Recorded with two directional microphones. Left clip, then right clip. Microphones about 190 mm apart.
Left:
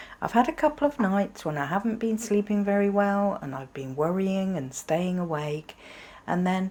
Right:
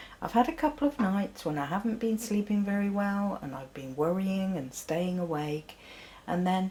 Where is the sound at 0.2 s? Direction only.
40° left (ahead or behind).